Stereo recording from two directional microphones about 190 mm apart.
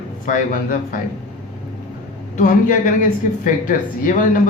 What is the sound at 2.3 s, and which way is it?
Speech, 45° left (ahead or behind).